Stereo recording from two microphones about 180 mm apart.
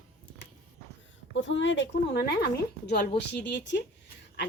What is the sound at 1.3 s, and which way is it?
A woman's voice, 90° left.